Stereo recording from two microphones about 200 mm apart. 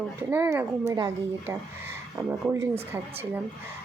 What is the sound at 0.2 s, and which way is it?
A woman's voice, 10° right (ahead or behind).